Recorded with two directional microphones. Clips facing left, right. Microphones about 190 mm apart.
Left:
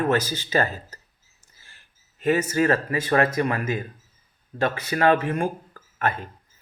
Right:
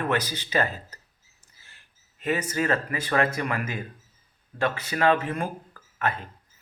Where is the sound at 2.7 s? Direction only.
35° left (ahead or behind).